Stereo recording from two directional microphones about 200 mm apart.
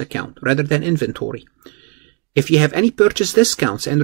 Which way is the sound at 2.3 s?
10° right (ahead or behind).